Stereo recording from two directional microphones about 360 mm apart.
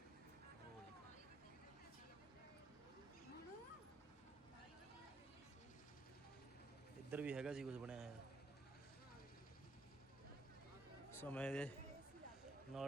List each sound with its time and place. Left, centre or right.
7.1 s a man's voice: centre
11.1 s a man's voice: centre
12.7 s a man's voice: centre